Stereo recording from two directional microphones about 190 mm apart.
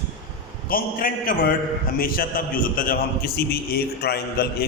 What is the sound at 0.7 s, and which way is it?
A man's voice, 50° left (ahead or behind).